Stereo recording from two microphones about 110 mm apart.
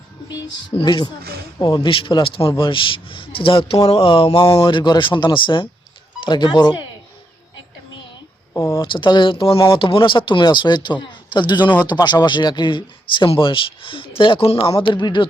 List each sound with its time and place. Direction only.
0.8 s a man's voice: 40° left (ahead or behind)
1.8 s speech: 50° left (ahead or behind)
4.4 s speech: 40° left (ahead or behind)
8.5 s speech: 25° left (ahead or behind)
8.8 s speech: 45° left (ahead or behind)